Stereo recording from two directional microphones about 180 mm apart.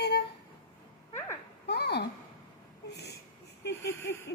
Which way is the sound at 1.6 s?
65° left (ahead or behind).